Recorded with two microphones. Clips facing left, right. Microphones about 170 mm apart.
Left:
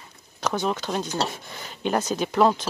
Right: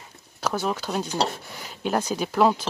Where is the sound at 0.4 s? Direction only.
5° right (ahead or behind).